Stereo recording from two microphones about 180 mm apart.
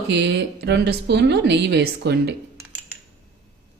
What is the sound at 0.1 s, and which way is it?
A woman's voice, 70° right (ahead or behind).